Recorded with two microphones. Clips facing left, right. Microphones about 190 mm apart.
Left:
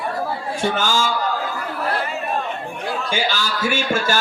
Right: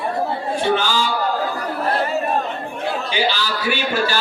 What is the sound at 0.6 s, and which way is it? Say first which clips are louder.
Speech: right 1 dB; 45° left (ahead or behind).